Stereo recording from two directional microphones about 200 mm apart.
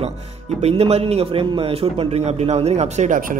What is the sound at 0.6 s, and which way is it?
A man's voice, 30° right (ahead or behind).